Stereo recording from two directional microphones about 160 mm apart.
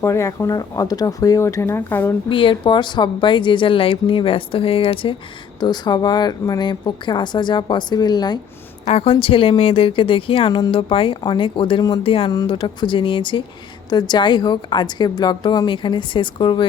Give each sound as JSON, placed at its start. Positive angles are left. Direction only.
{"t": 0.0, "sound": "speech", "side_deg": 20}
{"t": 2.3, "sound": "a woman's voice", "side_deg": 30}
{"t": 8.9, "sound": "a woman's voice", "side_deg": 40}